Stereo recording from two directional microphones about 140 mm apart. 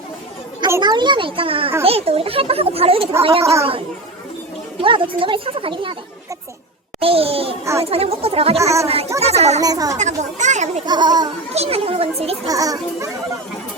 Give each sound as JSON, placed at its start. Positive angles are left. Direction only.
{"t": 0.8, "sound": "speech", "side_deg": -30}
{"t": 3.4, "sound": "a child's voice", "side_deg": -20}
{"t": 4.8, "sound": "speech", "side_deg": -40}
{"t": 7.0, "sound": "speech", "side_deg": -45}
{"t": 7.6, "sound": "a child's voice", "side_deg": -20}
{"t": 7.9, "sound": "speech", "side_deg": -45}
{"t": 8.6, "sound": "a child's voice", "side_deg": -20}
{"t": 9.2, "sound": "speech", "side_deg": -50}
{"t": 9.6, "sound": "a child's voice", "side_deg": -25}
{"t": 10.0, "sound": "speech", "side_deg": -60}
{"t": 10.8, "sound": "speech", "side_deg": -30}
{"t": 11.5, "sound": "speech", "side_deg": -45}
{"t": 12.5, "sound": "a child's voice", "side_deg": -25}